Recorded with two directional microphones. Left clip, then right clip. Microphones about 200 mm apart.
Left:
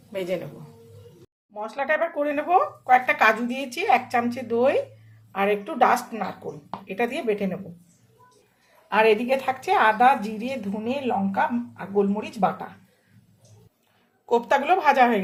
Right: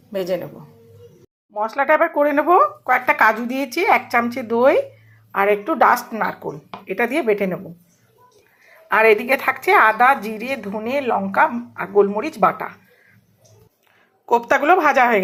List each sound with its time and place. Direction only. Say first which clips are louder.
0.1 s speech: right 5 dB; 20° right (ahead or behind)
1.5 s speech: right 8 dB; 20° right (ahead or behind)
8.9 s a woman's voice: right 5 dB; 15° right (ahead or behind)
14.3 s a woman's voice: right 5 dB; 20° right (ahead or behind)